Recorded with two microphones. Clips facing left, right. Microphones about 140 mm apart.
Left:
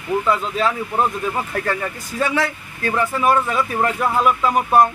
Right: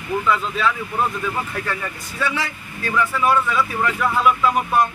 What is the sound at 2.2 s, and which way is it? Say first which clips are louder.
Speech: left 4 dB; 50° left (ahead or behind).